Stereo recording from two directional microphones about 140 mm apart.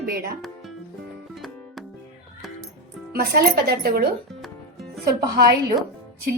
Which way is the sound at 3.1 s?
90° right.